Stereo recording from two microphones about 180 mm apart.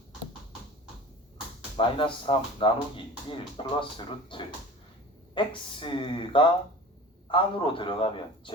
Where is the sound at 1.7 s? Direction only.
30° left (ahead or behind).